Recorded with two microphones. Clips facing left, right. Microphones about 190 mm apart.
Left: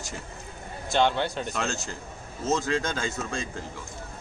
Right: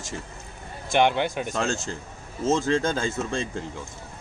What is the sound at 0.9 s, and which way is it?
Speech, 15° right (ahead or behind).